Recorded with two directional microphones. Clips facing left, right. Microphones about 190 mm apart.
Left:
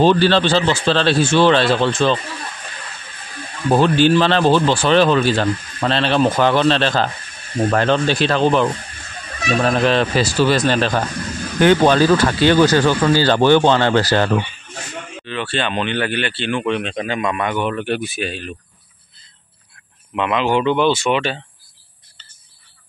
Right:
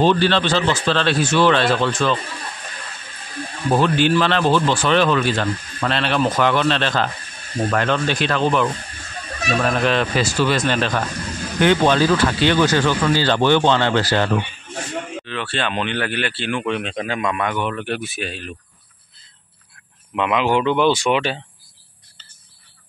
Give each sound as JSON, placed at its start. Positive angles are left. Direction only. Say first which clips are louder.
{"t": 0.0, "sound": "speech", "louder": "left 3 dB", "side_deg": 35}
{"t": 3.7, "sound": "speech", "louder": "left 3 dB", "side_deg": 30}
{"t": 15.2, "sound": "speech", "louder": "left 6 dB", "side_deg": 0}
{"t": 20.2, "sound": "speech", "louder": "left 1 dB", "side_deg": -5}